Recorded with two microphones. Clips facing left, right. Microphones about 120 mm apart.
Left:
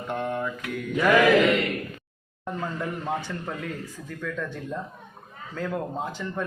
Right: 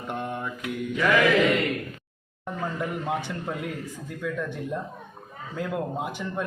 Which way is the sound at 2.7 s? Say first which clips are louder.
Right 2 dB; 15° right (ahead or behind).